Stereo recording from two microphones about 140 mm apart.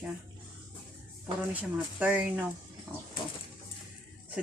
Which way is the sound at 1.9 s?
10° right (ahead or behind).